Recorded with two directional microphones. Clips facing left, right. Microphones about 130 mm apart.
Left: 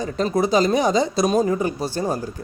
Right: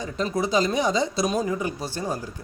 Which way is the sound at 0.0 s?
45° left (ahead or behind).